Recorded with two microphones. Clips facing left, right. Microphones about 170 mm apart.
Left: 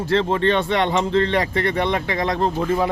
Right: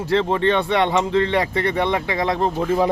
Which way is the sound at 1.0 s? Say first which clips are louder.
Even; 10° right (ahead or behind).